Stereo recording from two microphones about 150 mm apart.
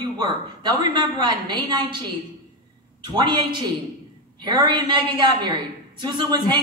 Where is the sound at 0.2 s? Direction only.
30° right (ahead or behind).